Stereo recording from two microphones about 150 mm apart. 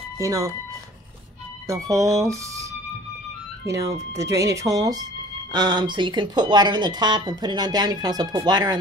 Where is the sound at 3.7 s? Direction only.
20° right (ahead or behind).